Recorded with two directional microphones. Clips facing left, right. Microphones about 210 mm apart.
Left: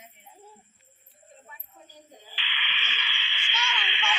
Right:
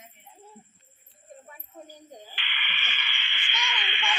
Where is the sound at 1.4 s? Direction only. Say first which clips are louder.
Right 7 dB; 45° right (ahead or behind).